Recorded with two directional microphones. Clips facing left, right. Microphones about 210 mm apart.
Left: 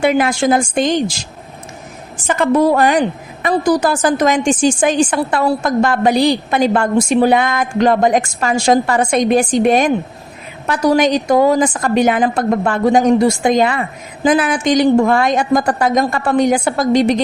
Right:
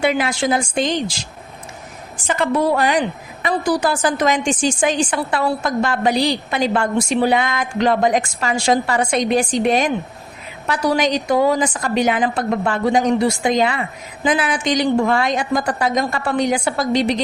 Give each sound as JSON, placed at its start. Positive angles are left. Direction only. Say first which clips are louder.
{"t": 0.0, "sound": "a woman's voice", "louder": "left 5 dB", "side_deg": 45}